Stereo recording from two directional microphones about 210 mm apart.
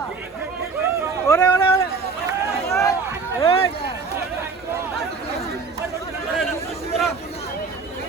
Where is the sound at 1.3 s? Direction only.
15° left (ahead or behind).